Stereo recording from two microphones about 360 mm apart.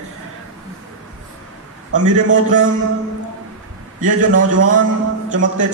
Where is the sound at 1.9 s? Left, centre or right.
Right.